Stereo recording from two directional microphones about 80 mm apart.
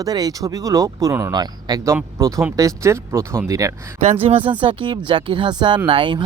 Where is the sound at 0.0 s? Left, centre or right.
Right.